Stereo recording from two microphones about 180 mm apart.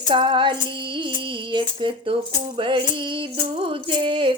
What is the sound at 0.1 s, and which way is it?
Music, 25° right (ahead or behind).